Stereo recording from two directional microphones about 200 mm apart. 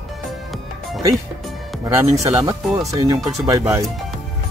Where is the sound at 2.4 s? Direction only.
15° right (ahead or behind).